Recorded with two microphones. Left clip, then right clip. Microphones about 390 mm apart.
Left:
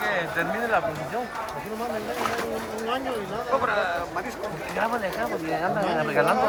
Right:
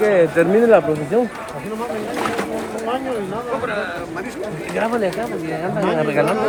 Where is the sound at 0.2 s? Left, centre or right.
Centre.